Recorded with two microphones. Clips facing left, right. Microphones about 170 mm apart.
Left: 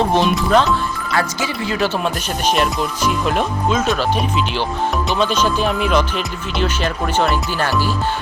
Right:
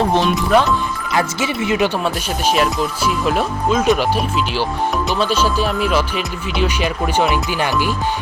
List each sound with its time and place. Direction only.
0.2 s speech: centre (ahead or behind)
1.1 s speech: 20° right (ahead or behind)
2.6 s speech: centre (ahead or behind)
5.1 s speech: 5° right (ahead or behind)